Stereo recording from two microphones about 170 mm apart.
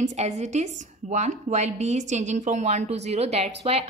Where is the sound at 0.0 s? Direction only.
40° right (ahead or behind).